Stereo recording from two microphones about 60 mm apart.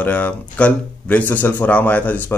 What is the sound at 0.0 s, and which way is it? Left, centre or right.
A man's voice, left.